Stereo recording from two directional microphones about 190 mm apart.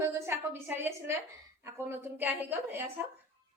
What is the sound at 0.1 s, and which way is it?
A woman's voice, 10° right (ahead or behind).